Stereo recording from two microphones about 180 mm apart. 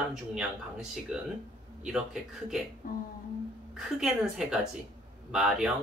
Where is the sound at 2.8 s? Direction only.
50° left (ahead or behind).